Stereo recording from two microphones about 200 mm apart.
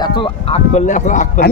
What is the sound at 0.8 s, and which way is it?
Speech, 40° left (ahead or behind).